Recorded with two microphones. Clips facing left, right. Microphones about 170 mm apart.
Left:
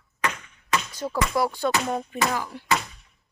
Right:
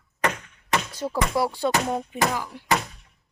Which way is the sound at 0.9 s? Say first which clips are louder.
Even; 30° right (ahead or behind).